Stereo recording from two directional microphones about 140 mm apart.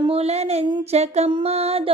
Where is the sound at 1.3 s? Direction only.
35° right (ahead or behind).